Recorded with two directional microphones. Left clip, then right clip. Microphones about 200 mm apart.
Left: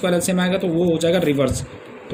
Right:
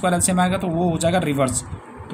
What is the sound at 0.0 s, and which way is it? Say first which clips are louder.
Speech: even; 50° right (ahead or behind).